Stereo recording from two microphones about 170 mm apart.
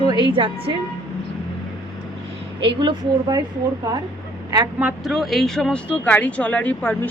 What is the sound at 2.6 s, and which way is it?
Speech, 30° right (ahead or behind).